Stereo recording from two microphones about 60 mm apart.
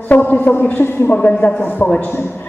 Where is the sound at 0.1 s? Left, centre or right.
Left.